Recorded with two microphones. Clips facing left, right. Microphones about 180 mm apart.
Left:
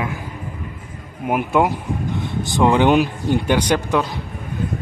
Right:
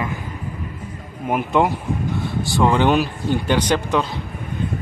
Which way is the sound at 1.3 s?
10° left (ahead or behind).